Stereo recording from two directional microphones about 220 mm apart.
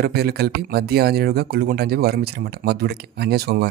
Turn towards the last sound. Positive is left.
turn(degrees=-45)  # may be behind; listen again after turning